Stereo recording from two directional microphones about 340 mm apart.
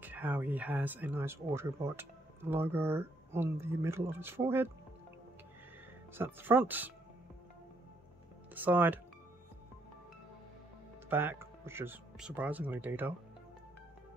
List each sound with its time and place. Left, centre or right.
0.0 s speech: centre
6.1 s speech: centre
8.5 s speech: centre
11.1 s speech: centre